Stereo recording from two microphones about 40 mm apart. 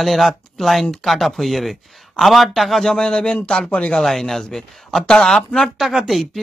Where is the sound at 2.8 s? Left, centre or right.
Centre.